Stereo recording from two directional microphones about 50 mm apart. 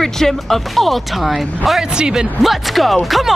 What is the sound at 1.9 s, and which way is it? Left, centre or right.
Speech, centre.